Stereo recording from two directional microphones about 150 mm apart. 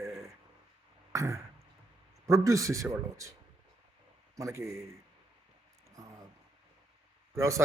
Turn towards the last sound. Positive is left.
turn(degrees=-20)  # may be behind; listen again after turning